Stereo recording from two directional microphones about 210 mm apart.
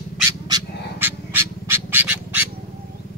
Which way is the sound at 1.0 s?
10° right (ahead or behind).